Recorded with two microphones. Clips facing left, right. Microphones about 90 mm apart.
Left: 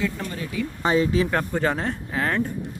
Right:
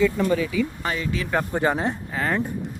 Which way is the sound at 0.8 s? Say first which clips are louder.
Left 7 dB; 30° left (ahead or behind).